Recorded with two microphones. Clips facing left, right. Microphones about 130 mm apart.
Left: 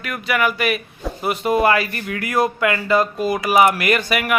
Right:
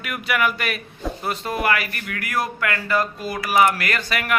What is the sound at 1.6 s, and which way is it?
Speech, 25° left (ahead or behind).